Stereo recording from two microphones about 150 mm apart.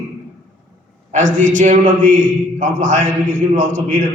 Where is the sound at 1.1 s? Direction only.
60° right (ahead or behind).